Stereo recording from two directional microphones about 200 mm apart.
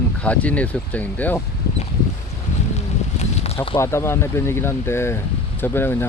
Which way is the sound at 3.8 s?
15° left (ahead or behind).